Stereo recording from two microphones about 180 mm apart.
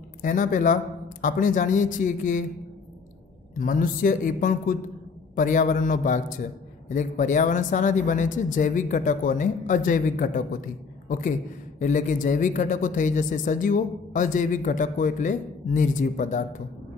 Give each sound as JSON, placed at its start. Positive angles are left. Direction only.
{"t": 0.2, "sound": "speech", "side_deg": 50}
{"t": 3.5, "sound": "a man's voice", "side_deg": 50}